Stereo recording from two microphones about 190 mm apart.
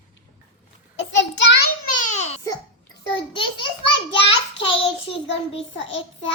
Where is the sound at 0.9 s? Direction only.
75° left (ahead or behind).